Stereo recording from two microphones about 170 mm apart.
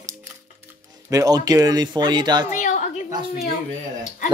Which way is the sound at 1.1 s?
20° right (ahead or behind).